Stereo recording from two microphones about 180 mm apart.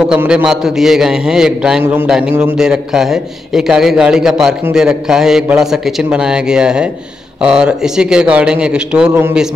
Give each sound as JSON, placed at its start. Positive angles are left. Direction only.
{"t": 0.0, "sound": "a man's voice", "side_deg": -5}